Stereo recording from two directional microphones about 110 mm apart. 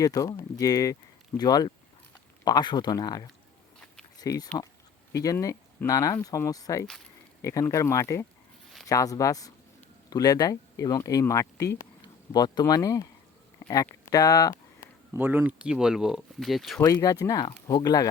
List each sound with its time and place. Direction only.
0.0 s speech: 30° left (ahead or behind)
13.6 s a sound: 35° left (ahead or behind)
15.2 s speech: 15° right (ahead or behind); by 16.8 s centre (ahead or behind)
16.8 s speech: 35° left (ahead or behind)